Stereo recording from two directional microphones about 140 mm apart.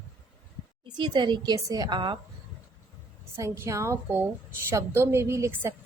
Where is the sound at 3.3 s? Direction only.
20° right (ahead or behind).